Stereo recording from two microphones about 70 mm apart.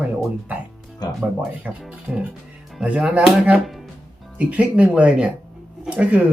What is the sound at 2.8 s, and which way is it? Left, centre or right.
Speech, centre.